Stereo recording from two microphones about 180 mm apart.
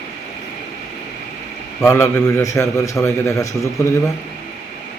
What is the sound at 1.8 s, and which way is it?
A man's voice, 15° left (ahead or behind).